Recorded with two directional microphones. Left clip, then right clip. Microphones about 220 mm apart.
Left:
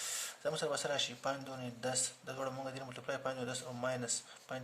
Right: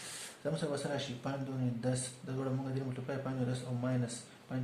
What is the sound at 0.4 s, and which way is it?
Speech, 45° left (ahead or behind).